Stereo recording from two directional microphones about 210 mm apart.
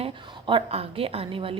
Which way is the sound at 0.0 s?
25° right (ahead or behind).